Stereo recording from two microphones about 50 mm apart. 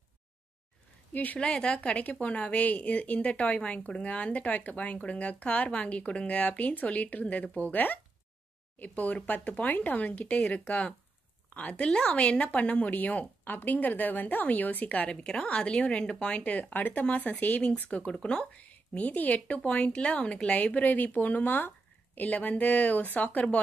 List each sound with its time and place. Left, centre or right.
1.1 s speech: left
1.4 s a woman's voice: centre
18.1 s speech: centre